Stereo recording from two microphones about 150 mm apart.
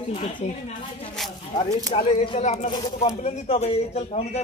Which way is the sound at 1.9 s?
35° left (ahead or behind).